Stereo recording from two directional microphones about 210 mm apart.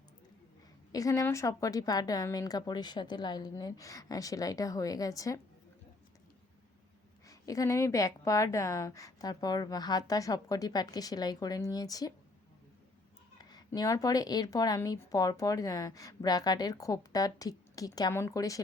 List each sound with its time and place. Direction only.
0.9 s a woman's voice: 15° left (ahead or behind)
7.3 s a woman's voice: 15° left (ahead or behind)
13.4 s a woman's voice: 20° left (ahead or behind)